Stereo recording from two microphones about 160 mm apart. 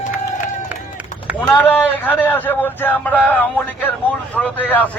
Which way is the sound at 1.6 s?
10° left (ahead or behind).